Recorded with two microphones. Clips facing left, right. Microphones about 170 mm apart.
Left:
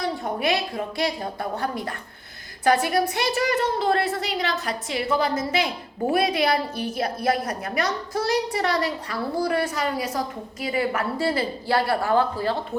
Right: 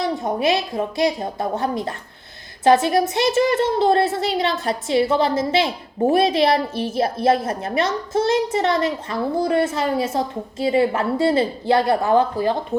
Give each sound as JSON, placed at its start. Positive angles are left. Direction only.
{"t": 0.0, "sound": "a woman's voice", "side_deg": -25}